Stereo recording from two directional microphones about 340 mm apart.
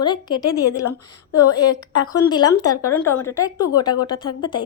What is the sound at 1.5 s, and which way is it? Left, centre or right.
Speech, left.